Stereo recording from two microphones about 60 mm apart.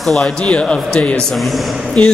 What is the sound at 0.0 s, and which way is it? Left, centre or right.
A man's voice, centre.